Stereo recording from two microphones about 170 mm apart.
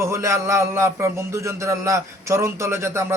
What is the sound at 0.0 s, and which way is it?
Music, 15° right (ahead or behind).